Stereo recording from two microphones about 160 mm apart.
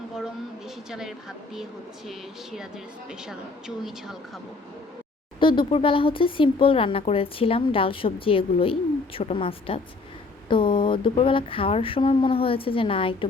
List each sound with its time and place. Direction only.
0.9 s speech: 5° right (ahead or behind)
3.8 s speech: centre (ahead or behind)
5.4 s speech: 30° left (ahead or behind)